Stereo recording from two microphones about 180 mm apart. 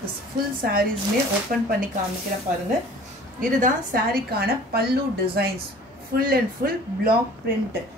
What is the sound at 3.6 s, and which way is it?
A woman's voice, 55° right (ahead or behind).